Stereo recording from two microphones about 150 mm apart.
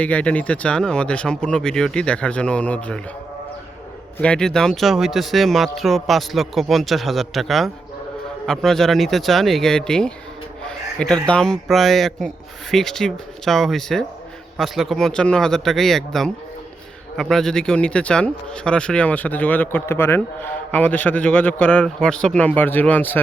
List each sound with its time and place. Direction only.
0.0 s a man's voice: 10° left (ahead or behind)
4.2 s a man's voice: 5° left (ahead or behind)